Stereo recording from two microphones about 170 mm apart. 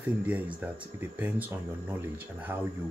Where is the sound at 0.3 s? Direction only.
10° right (ahead or behind).